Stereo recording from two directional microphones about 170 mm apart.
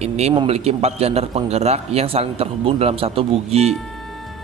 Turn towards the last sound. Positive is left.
turn(degrees=-35)  # may be behind; listen again after turning